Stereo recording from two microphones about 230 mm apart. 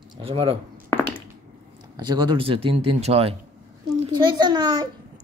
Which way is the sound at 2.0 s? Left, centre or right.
Centre.